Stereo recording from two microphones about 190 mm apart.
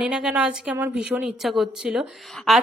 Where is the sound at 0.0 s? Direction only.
5° right (ahead or behind).